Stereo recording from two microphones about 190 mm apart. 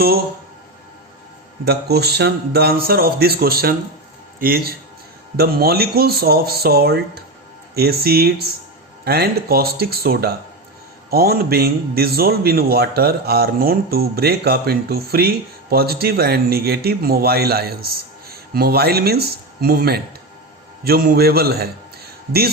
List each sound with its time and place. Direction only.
1.6 s a man's voice: 55° right (ahead or behind)